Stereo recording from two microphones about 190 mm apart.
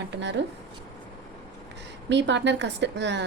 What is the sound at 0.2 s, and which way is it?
Speech, 65° right (ahead or behind).